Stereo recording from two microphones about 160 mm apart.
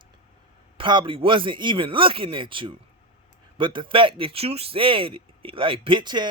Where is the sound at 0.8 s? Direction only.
30° right (ahead or behind).